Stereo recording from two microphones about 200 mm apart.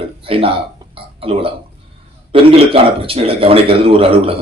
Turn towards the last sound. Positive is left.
turn(degrees=-30)  # may be behind; listen again after turning